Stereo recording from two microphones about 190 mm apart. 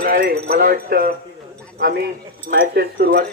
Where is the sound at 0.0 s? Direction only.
50° right (ahead or behind).